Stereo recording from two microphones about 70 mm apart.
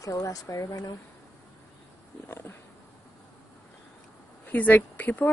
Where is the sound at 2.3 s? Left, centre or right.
Left.